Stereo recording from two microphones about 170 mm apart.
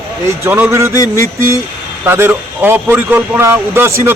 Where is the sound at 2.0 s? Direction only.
15° right (ahead or behind).